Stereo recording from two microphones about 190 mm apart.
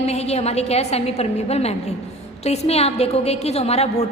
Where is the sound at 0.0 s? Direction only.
35° left (ahead or behind).